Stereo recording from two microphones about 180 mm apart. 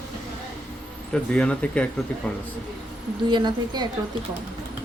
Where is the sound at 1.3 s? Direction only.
5° left (ahead or behind).